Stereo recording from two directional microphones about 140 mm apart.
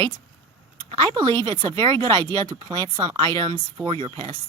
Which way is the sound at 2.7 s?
25° right (ahead or behind).